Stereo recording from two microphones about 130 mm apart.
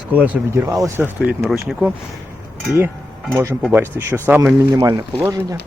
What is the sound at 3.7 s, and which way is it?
Speech, 15° right (ahead or behind).